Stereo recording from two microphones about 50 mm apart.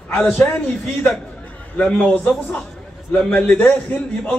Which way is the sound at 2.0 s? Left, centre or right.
Left.